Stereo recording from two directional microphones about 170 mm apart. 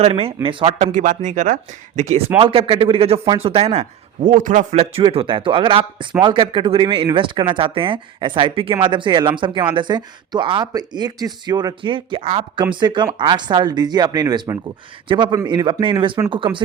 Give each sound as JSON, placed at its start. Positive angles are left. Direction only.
{"t": 0.0, "sound": "speech", "side_deg": -35}
{"t": 0.9, "sound": "speech", "side_deg": -45}